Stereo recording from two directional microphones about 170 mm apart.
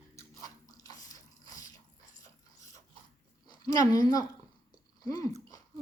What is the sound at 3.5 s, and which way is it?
A woman's voice, 20° left (ahead or behind).